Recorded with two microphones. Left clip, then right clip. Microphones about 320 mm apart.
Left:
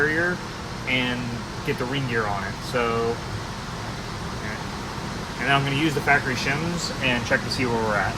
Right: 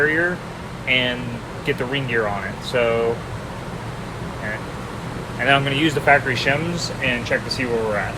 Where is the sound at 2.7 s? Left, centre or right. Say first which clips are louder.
Right 5 dB; centre.